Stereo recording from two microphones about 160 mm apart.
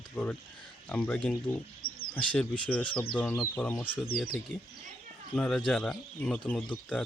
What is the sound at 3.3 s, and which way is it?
Speech, 20° left (ahead or behind).